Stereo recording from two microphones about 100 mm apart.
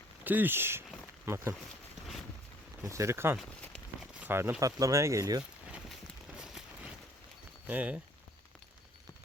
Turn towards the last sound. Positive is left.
turn(degrees=-15)  # may be behind; listen again after turning